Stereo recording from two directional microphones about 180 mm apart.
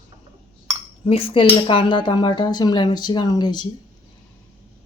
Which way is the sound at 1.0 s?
30° left (ahead or behind).